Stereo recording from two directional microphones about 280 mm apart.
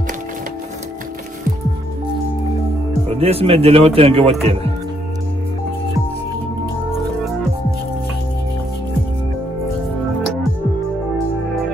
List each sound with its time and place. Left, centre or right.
3.1 s speech: right